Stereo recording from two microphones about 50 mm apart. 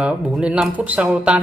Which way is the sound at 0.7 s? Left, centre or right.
Right.